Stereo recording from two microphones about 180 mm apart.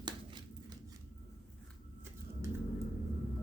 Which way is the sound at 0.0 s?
25° right (ahead or behind).